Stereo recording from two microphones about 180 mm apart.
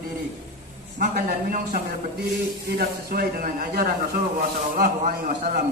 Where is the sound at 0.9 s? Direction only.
50° right (ahead or behind).